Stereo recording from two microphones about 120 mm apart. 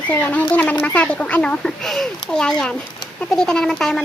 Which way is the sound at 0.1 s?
15° left (ahead or behind).